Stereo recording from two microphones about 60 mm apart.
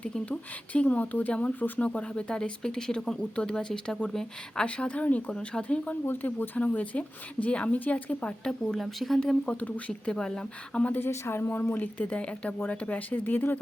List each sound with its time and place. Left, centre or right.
0.3 s speech: left
4.6 s speech: left
6.1 s speech: left
6.6 s speech: left
8.4 s speech: centre
9.2 s speech: centre
11.0 s speech: left